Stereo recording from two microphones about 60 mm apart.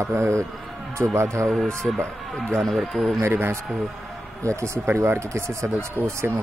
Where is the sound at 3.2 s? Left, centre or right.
Right.